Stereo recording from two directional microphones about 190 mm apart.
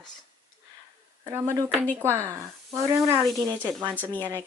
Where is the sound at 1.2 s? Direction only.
15° right (ahead or behind).